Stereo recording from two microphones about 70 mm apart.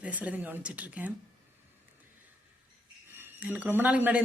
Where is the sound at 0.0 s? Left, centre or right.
Right.